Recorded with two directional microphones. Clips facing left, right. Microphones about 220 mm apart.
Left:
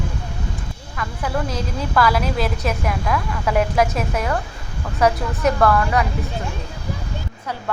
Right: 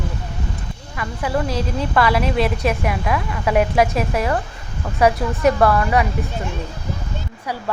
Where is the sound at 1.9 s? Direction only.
Centre (ahead or behind).